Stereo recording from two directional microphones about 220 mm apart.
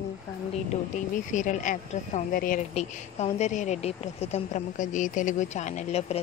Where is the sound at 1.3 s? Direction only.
35° left (ahead or behind).